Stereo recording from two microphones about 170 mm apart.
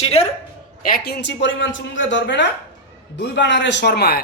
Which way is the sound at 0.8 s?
65° left (ahead or behind).